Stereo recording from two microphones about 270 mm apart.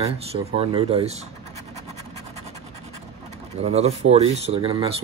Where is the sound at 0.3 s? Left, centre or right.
Right.